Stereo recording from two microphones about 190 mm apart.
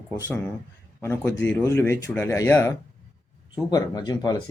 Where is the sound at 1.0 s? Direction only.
10° left (ahead or behind).